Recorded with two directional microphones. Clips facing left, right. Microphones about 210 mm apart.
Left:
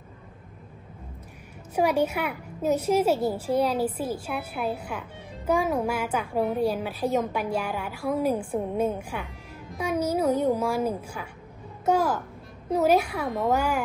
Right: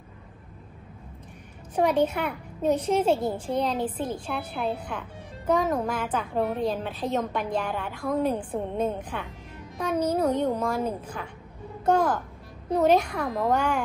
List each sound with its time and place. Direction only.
1.8 s a woman's voice: 10° left (ahead or behind)